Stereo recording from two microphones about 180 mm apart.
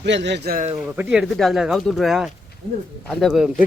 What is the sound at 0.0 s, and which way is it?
Speech, 75° right (ahead or behind).